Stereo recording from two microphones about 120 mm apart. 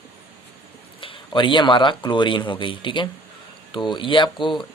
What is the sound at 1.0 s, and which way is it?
Speech, 45° left (ahead or behind).